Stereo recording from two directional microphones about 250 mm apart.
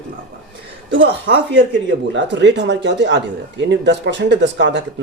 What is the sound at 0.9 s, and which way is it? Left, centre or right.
Speech, right.